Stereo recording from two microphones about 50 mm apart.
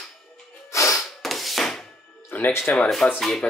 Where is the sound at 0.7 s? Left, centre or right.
Left.